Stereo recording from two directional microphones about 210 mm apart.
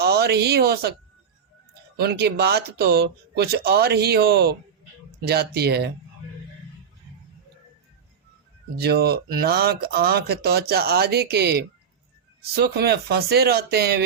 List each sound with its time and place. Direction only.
0.0 s speech: 50° right (ahead or behind)
2.0 s speech: 50° right (ahead or behind)
8.7 s speech: 50° right (ahead or behind)